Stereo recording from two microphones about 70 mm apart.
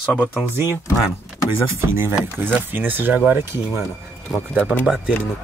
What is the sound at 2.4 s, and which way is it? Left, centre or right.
Speech, right.